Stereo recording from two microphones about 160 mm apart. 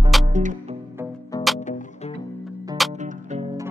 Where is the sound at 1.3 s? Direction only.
25° left (ahead or behind).